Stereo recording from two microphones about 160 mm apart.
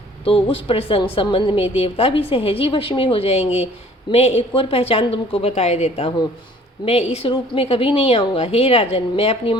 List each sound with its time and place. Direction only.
0.3 s a woman's voice: 35° left (ahead or behind)